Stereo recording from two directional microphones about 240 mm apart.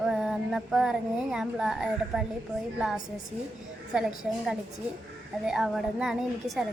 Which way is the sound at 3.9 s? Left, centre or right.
Centre.